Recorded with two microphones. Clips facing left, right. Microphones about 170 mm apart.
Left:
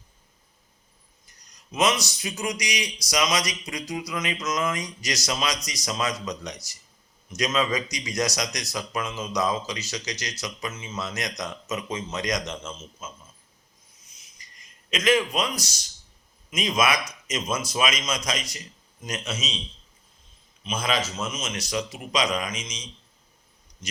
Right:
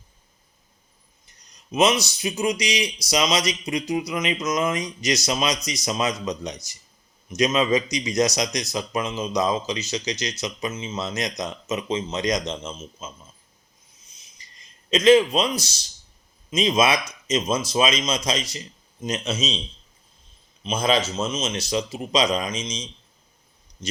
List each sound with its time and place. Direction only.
1.3 s speech: 25° right (ahead or behind)
14.2 s a sound: 25° right (ahead or behind)
16.5 s speech: 25° right (ahead or behind)
20.7 s speech: 30° right (ahead or behind)